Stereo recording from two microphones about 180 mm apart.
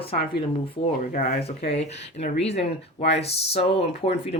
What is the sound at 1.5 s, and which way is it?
Speech, 35° left (ahead or behind).